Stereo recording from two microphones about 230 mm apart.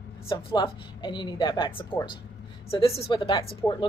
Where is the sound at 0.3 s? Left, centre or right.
Centre.